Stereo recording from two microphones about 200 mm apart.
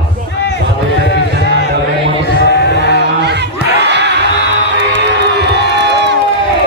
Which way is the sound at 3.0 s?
60° right (ahead or behind).